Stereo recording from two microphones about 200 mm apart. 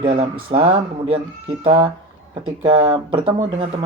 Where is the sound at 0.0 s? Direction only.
25° right (ahead or behind).